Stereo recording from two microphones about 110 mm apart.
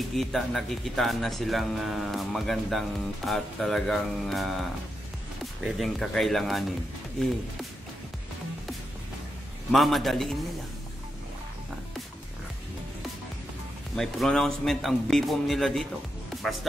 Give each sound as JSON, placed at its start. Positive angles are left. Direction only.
{"t": 0.1, "sound": "speech", "side_deg": 0}
{"t": 9.7, "sound": "speech", "side_deg": 0}
{"t": 13.9, "sound": "speech", "side_deg": 5}